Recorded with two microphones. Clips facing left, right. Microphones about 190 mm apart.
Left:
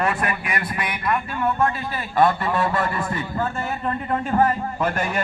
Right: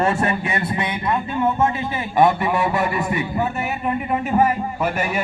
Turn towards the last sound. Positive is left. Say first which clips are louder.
# right 1 dB
turn(degrees=-10)  # may be behind; listen again after turning